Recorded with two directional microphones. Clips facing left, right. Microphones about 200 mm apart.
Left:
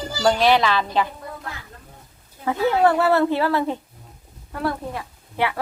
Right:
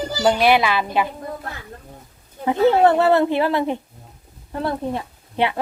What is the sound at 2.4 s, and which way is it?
A woman's voice, 20° right (ahead or behind).